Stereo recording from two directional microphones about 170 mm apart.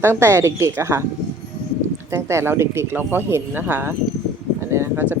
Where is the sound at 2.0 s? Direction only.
15° right (ahead or behind).